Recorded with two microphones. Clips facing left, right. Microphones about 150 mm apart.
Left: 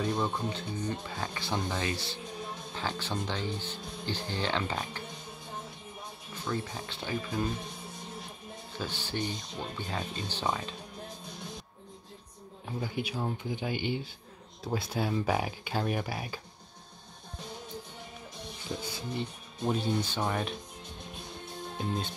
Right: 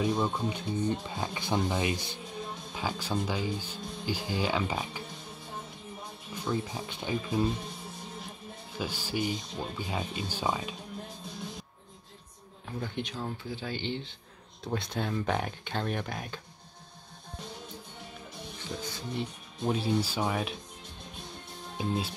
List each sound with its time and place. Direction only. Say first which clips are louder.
0.0 s speech: right 2 dB; 5° right (ahead or behind)
6.3 s speech: right 2 dB; 15° right (ahead or behind)
8.7 s speech: right 2 dB; 10° right (ahead or behind)
12.6 s speech: left 1 dB; 5° left (ahead or behind)
18.7 s music: left 1 dB; 20° left (ahead or behind)
19.1 s speech: right 1 dB; centre (ahead or behind)
21.7 s music: right 3 dB; 5° right (ahead or behind)